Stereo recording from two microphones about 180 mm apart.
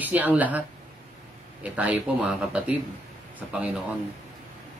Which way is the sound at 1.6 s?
5° right (ahead or behind).